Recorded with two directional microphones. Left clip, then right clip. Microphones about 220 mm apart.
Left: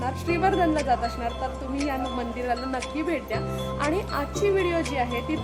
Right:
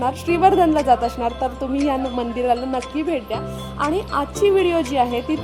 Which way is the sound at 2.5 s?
20° right (ahead or behind).